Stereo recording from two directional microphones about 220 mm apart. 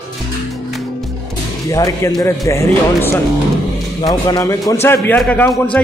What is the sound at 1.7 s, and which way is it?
A man's voice, 15° left (ahead or behind).